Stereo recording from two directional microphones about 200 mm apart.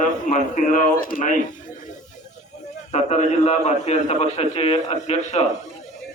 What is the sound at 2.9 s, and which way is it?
A man's voice, 35° left (ahead or behind).